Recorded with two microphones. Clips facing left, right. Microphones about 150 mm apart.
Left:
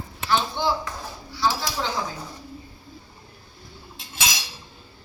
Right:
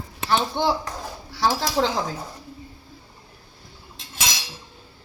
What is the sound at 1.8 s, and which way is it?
Speech, 55° right (ahead or behind).